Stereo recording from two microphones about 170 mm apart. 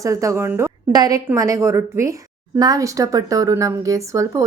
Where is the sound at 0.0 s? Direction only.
20° right (ahead or behind).